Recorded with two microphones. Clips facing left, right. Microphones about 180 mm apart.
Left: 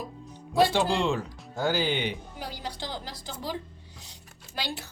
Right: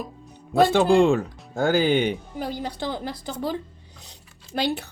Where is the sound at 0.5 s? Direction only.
55° right (ahead or behind).